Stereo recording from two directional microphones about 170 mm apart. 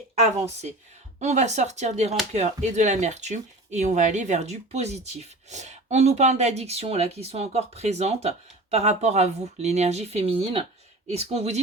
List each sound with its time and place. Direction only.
1.2 s speech: 45° right (ahead or behind)